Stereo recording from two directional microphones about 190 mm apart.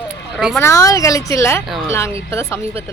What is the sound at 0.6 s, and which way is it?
Speech, 15° left (ahead or behind).